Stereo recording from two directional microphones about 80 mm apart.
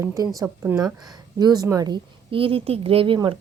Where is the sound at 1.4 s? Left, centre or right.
Right.